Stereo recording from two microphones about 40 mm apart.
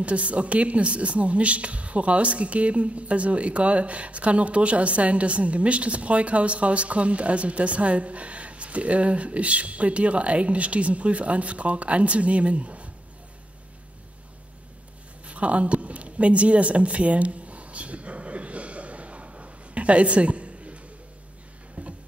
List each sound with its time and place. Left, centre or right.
0.0 s speech: right
15.2 s a sound: right
21.8 s music: right